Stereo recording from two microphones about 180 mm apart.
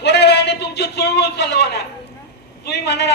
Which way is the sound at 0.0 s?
70° left (ahead or behind).